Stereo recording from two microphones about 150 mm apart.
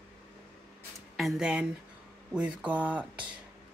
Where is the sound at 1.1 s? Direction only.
Centre (ahead or behind).